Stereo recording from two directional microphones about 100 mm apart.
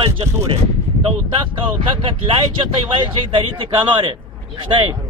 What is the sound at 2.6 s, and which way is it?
Speech, 60° right (ahead or behind).